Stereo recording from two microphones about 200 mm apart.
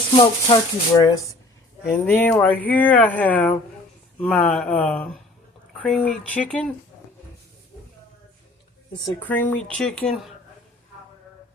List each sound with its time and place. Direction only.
0.2 s speech: 25° left (ahead or behind)
1.9 s speech: 10° left (ahead or behind)
8.9 s speech: 15° left (ahead or behind)